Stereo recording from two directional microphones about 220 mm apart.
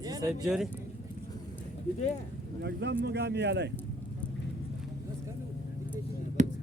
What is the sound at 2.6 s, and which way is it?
Speech, 50° right (ahead or behind).